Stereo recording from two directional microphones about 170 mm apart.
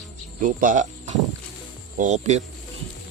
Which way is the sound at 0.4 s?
50° right (ahead or behind).